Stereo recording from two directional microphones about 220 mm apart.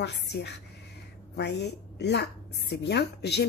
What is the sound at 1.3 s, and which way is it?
Speech, 50° left (ahead or behind).